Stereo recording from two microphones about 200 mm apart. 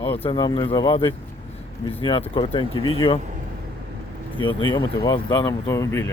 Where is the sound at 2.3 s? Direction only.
25° left (ahead or behind).